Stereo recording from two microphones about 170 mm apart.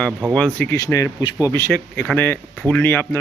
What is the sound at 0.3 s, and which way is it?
Speech, 10° left (ahead or behind).